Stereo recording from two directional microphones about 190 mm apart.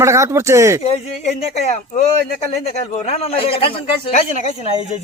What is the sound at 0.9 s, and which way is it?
Speech, 35° left (ahead or behind).